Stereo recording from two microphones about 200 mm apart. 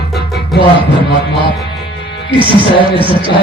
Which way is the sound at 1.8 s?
55° left (ahead or behind).